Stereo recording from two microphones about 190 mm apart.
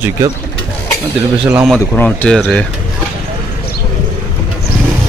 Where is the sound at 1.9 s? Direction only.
5° left (ahead or behind).